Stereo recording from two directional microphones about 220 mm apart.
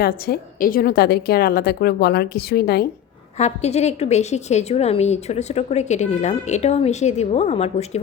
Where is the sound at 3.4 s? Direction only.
30° left (ahead or behind).